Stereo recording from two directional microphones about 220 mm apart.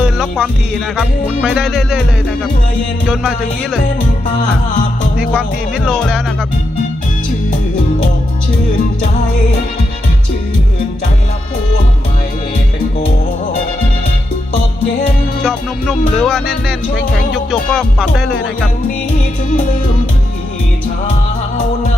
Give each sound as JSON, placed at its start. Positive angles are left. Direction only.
{"t": 0.0, "sound": "music", "side_deg": 0}
{"t": 5.4, "sound": "music", "side_deg": 0}
{"t": 15.4, "sound": "music", "side_deg": 0}
{"t": 19.5, "sound": "music", "side_deg": 35}